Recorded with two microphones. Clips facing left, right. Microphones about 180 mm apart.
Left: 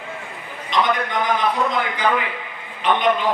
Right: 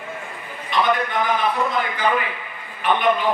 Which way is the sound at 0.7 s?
20° left (ahead or behind).